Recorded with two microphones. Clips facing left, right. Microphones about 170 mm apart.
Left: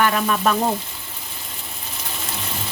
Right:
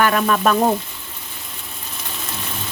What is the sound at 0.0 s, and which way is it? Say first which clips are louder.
Frying: right 2 dB; 60° right (ahead or behind).